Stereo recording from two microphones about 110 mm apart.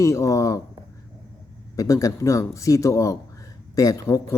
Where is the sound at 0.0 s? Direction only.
25° left (ahead or behind).